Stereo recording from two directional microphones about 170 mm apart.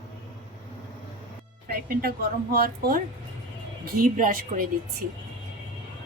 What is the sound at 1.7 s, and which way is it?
Music, 65° right (ahead or behind).